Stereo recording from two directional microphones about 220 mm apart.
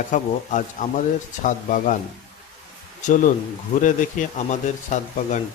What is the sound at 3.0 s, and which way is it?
A man's voice, 35° left (ahead or behind).